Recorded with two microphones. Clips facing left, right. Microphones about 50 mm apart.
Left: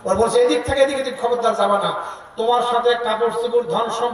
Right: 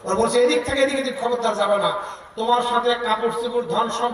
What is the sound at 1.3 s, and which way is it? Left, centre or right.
Speech, left.